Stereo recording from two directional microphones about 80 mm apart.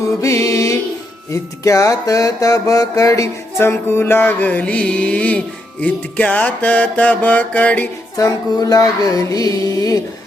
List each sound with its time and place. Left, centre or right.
0.2 s music: left
1.3 s mantra: left
3.6 s music: left; by 5.4 s centre
5.8 s mantra: centre
8.1 s mantra: left